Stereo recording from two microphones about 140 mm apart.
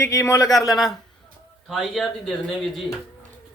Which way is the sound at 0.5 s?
Centre (ahead or behind).